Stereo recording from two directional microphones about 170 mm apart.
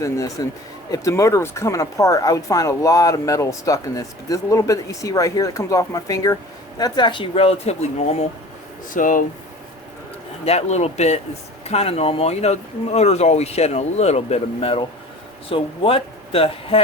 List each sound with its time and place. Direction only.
0.0 s speech: 20° left (ahead or behind); by 8.3 s 40° left (ahead or behind)
8.9 s speech: 50° left (ahead or behind)
10.4 s speech: 40° left (ahead or behind)